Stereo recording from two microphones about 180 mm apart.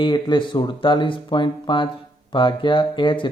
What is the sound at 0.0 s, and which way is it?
Speech, 25° left (ahead or behind).